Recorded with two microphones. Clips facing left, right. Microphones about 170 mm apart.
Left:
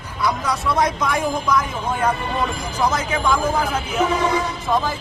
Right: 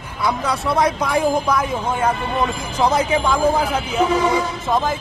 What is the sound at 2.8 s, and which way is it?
Vehicle, 30° right (ahead or behind).